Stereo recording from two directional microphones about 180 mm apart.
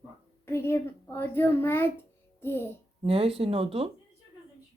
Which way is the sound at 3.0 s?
30° right (ahead or behind).